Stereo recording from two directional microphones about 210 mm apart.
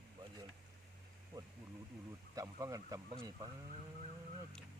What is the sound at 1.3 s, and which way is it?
Speech, 20° right (ahead or behind).